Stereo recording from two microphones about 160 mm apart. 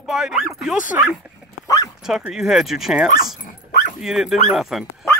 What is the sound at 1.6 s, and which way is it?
Bow-wow, 20° left (ahead or behind).